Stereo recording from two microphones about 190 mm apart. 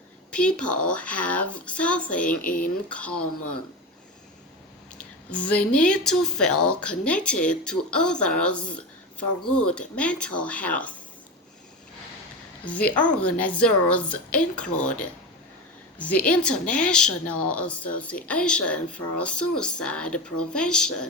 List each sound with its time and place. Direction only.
0.3 s speech: 5° left (ahead or behind)
2.4 s speech: 45° left (ahead or behind)
4.9 s speech: 5° left (ahead or behind)
12.6 s speech: 5° left (ahead or behind)
16.0 s speech: 5° left (ahead or behind)